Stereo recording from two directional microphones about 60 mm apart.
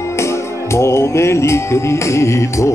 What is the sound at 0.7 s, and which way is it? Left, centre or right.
Music, left.